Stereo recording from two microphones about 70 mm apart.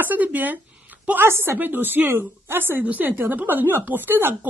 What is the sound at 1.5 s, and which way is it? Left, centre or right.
A woman's voice, right.